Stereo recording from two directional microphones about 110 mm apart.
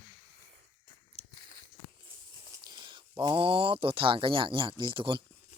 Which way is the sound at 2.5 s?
40° right (ahead or behind).